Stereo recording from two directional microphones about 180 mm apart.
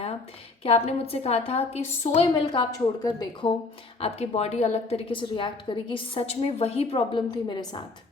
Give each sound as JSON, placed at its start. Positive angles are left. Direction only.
{"t": 0.6, "sound": "a woman's voice", "side_deg": 35}
{"t": 4.0, "sound": "a woman's voice", "side_deg": 35}